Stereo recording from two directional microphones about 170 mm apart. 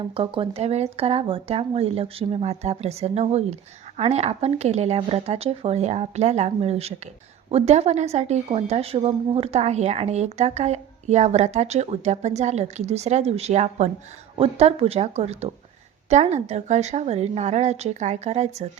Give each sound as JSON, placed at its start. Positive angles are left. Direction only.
{"t": 0.1, "sound": "speech", "side_deg": -30}